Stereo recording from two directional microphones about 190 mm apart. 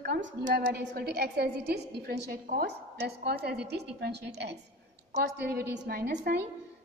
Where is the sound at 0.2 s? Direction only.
40° right (ahead or behind).